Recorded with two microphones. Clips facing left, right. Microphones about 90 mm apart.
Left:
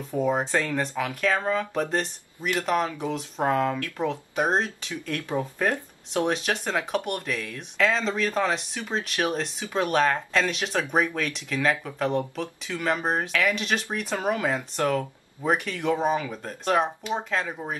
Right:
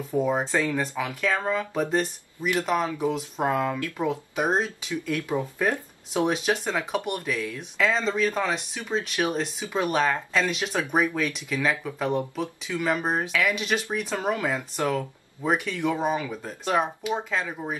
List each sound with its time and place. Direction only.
0.2 s speech: centre (ahead or behind)